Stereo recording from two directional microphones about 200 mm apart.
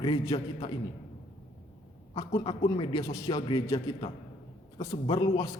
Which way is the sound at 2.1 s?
25° left (ahead or behind).